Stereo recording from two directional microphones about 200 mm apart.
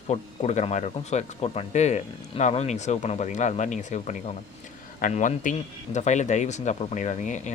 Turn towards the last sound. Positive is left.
turn(degrees=40)  # may be behind; listen again after turning